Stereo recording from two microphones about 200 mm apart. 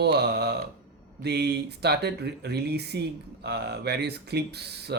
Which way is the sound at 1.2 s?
55° right (ahead or behind).